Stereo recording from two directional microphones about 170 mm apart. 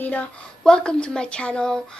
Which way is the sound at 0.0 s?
10° left (ahead or behind).